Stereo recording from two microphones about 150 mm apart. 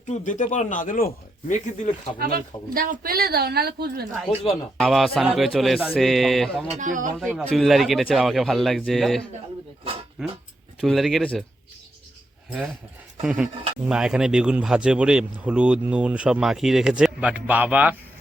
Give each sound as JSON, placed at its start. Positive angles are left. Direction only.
{"t": 0.1, "sound": "speech", "side_deg": 55}
{"t": 2.1, "sound": "a woman's voice", "side_deg": -75}
{"t": 4.8, "sound": "speech", "side_deg": 0}
{"t": 6.7, "sound": "speech", "side_deg": -60}
{"t": 7.2, "sound": "speech", "side_deg": 0}
{"t": 10.8, "sound": "speech", "side_deg": 0}
{"t": 12.5, "sound": "speech", "side_deg": -10}